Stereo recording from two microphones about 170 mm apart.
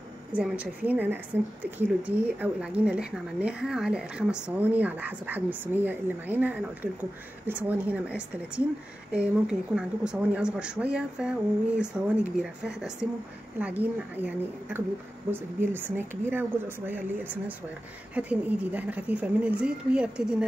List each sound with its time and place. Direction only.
0.3 s a woman's voice: 10° right (ahead or behind)